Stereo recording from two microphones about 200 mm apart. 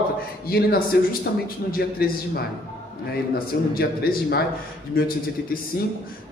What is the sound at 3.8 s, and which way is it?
Speech, 50° left (ahead or behind).